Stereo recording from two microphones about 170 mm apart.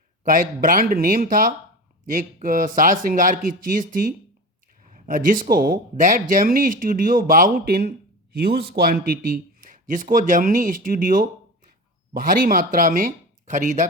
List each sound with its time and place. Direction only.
0.3 s speech: 55° right (ahead or behind)
9.2 s speech: 55° right (ahead or behind)